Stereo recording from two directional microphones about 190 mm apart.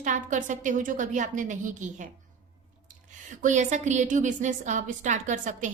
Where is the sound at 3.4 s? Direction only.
40° right (ahead or behind).